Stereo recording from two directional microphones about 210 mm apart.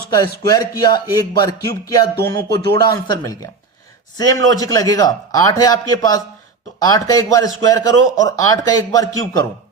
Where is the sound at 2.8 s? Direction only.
20° left (ahead or behind).